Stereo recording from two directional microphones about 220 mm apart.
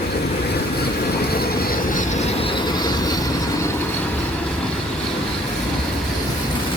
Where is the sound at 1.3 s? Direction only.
40° left (ahead or behind); by 3.1 s 20° left (ahead or behind).